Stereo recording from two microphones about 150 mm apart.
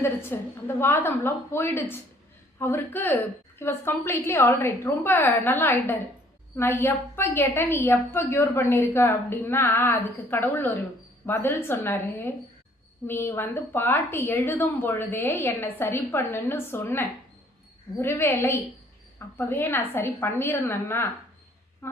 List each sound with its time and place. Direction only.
0.0 s a woman's voice: 15° left (ahead or behind)